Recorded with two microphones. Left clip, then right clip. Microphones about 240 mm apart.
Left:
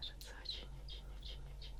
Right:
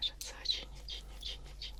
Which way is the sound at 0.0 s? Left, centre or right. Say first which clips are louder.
Right 11 dB; centre.